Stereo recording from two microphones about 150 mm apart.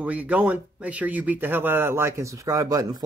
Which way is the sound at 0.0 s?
10° right (ahead or behind).